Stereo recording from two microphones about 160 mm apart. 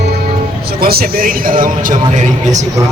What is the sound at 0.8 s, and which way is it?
Speech, 70° right (ahead or behind).